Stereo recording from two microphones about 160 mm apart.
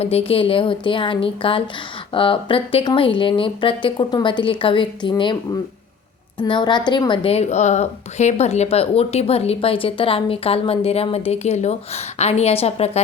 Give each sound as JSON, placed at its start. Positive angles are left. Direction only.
{"t": 0.0, "sound": "a woman's voice", "side_deg": 40}